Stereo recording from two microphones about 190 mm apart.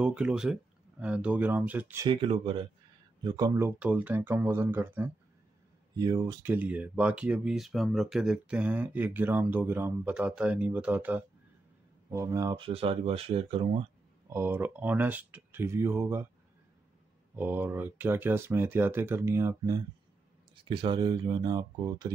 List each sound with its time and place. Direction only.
0.0 s speech: 5° right (ahead or behind)
2.0 s speech: 30° right (ahead or behind); by 5.1 s 10° right (ahead or behind)
5.9 s speech: 20° right (ahead or behind)
14.3 s speech: 10° right (ahead or behind)
17.4 s speech: 10° right (ahead or behind)
20.5 s speech: 25° right (ahead or behind)